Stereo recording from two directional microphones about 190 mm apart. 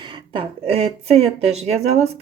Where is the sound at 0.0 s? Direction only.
25° right (ahead or behind).